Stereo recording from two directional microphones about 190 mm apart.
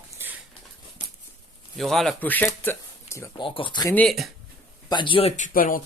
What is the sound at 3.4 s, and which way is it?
Speech, 25° left (ahead or behind).